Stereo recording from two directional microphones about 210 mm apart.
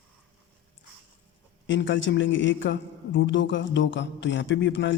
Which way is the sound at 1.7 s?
60° left (ahead or behind).